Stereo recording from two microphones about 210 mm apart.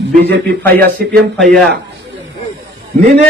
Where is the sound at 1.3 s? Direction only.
Centre (ahead or behind).